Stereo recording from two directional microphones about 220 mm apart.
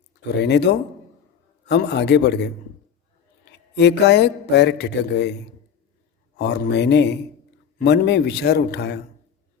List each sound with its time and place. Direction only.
0.3 s a man's voice: 50° left (ahead or behind)
6.3 s a man's voice: 50° left (ahead or behind)